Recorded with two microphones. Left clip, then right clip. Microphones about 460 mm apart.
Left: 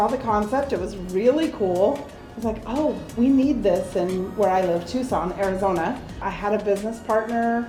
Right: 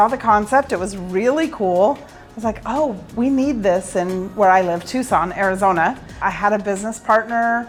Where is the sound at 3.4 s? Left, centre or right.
Right.